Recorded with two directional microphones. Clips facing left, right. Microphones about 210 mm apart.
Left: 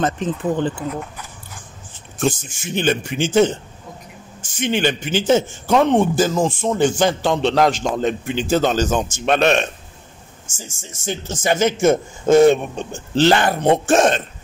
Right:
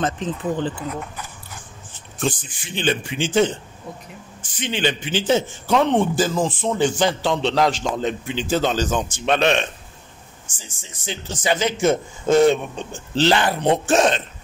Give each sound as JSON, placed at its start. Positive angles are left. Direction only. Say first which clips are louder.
{"t": 0.0, "sound": "a man's voice", "louder": "left 3 dB", "side_deg": 50}
{"t": 2.1, "sound": "a man's voice", "louder": "left 4 dB", "side_deg": 45}